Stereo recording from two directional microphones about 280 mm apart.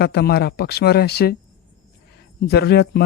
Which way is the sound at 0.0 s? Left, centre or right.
Left.